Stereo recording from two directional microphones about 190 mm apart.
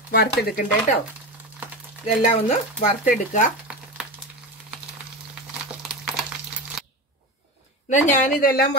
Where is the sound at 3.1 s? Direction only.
45° left (ahead or behind).